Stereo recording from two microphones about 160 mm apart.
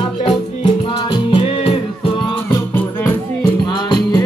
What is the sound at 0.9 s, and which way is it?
Music, 30° left (ahead or behind).